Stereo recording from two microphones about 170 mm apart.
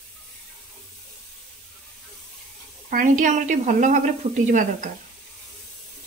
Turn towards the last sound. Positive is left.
turn(degrees=-50)  # may be behind; listen again after turning